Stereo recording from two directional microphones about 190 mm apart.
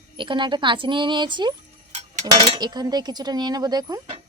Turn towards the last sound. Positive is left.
turn(degrees=-20)  # may be behind; listen again after turning